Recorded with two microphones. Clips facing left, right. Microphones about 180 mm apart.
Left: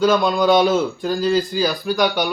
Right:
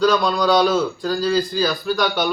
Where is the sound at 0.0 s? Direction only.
15° left (ahead or behind).